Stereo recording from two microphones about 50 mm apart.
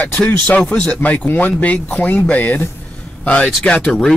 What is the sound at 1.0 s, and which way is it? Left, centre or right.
Speech, left.